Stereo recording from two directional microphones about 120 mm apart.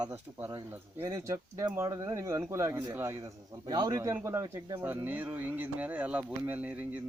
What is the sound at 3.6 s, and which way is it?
Speech, 35° right (ahead or behind).